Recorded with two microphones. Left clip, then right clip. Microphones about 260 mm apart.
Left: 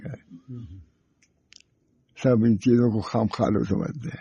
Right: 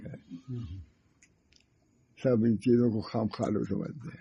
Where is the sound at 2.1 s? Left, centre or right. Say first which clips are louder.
Left 6 dB; left.